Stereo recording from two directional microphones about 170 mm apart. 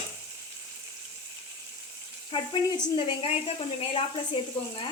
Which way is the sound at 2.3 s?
30° left (ahead or behind).